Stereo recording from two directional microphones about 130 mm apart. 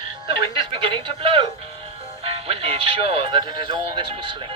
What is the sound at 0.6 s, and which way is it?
Music, 40° right (ahead or behind).